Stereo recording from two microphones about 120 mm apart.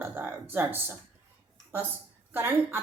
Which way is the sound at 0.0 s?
20° right (ahead or behind).